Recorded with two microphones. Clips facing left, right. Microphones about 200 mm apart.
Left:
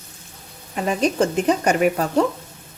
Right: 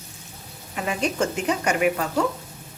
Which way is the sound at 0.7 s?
40° left (ahead or behind).